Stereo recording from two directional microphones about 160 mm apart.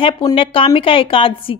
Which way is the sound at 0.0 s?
35° left (ahead or behind).